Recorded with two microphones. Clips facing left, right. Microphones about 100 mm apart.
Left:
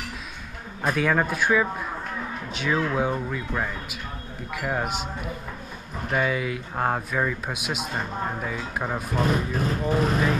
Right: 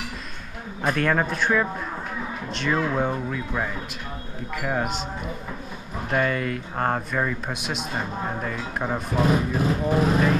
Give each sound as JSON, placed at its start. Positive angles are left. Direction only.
{"t": 0.8, "sound": "speech", "side_deg": 0}